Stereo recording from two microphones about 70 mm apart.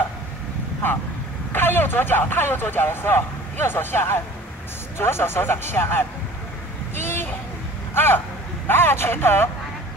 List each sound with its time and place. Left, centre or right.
1.5 s speech: left
7.9 s speech: left